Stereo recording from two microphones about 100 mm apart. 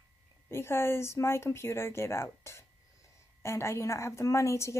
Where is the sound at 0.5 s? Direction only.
25° left (ahead or behind).